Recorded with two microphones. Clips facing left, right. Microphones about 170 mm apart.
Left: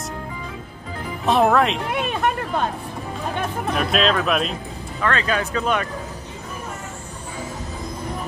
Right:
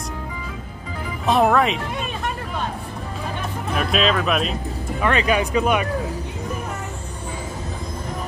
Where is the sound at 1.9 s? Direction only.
65° left (ahead or behind).